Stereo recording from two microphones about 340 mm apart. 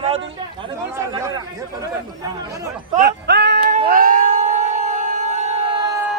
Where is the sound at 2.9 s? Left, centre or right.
Right.